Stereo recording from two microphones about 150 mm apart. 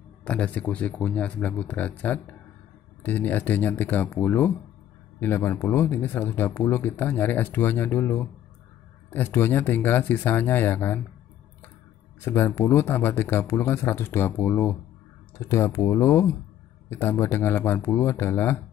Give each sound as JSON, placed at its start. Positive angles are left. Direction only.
{"t": 0.2, "sound": "speech", "side_deg": 10}
{"t": 12.3, "sound": "speech", "side_deg": 15}